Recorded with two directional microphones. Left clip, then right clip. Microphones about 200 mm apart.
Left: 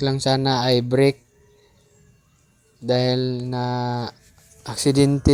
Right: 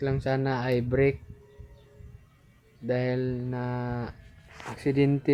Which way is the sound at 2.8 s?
40° left (ahead or behind).